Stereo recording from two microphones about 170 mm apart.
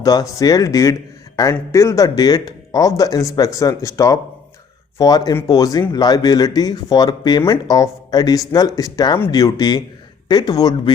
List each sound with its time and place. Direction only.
0.0 s speech: 20° left (ahead or behind)